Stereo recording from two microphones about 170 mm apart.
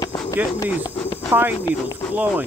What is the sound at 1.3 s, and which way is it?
Speech, 10° right (ahead or behind).